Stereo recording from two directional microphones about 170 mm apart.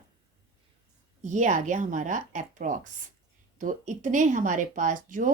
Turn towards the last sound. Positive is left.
turn(degrees=-50)  # may be behind; listen again after turning